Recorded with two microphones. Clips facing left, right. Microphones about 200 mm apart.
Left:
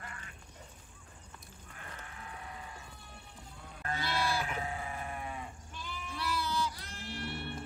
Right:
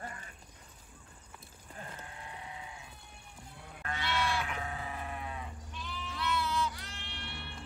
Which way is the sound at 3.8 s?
40° left (ahead or behind).